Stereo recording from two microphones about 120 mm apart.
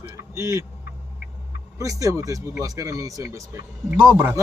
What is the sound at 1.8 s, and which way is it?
Speech, 30° right (ahead or behind).